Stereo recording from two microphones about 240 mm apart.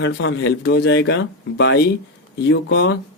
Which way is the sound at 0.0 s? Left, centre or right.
Left.